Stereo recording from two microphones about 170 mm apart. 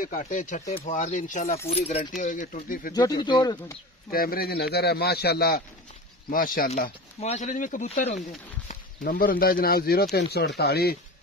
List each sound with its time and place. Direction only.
0.0 s speech: 50° left (ahead or behind)
1.7 s speech: 35° left (ahead or behind); by 2.9 s 50° left (ahead or behind)
2.9 s speech: 25° left (ahead or behind)
4.1 s a man's voice: 60° left (ahead or behind)
6.3 s speech: 55° left (ahead or behind)
7.2 s speech: 40° left (ahead or behind)
9.0 s speech: 55° left (ahead or behind)
10.1 s a man's voice: 75° left (ahead or behind)